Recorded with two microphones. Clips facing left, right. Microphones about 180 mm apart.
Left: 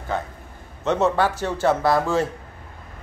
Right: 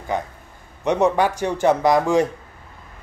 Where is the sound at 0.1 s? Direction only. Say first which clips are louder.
Right 2 dB; 15° right (ahead or behind).